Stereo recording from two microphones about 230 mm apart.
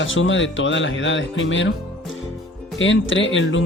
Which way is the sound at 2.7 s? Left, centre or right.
Left.